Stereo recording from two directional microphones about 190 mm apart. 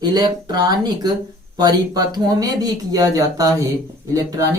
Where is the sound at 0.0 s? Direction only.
20° right (ahead or behind).